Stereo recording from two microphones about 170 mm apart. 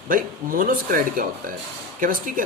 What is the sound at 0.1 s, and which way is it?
Speech, 55° right (ahead or behind).